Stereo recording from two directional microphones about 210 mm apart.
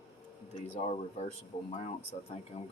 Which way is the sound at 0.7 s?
30° left (ahead or behind).